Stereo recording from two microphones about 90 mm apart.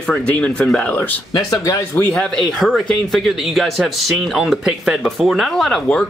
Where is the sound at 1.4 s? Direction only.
40° left (ahead or behind).